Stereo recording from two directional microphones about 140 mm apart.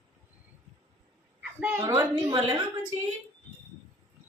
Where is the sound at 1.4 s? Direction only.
15° right (ahead or behind).